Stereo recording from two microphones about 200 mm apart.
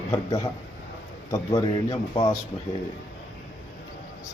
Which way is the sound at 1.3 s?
15° left (ahead or behind).